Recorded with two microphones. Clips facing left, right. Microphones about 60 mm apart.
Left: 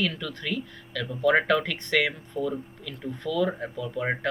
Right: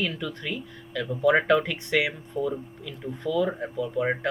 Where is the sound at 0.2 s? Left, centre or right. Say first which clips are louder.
Left 1 dB; centre.